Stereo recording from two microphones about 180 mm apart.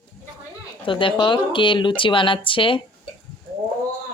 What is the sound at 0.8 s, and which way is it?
Speech, 30° left (ahead or behind).